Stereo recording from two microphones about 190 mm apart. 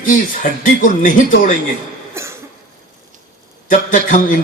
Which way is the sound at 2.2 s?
15° right (ahead or behind).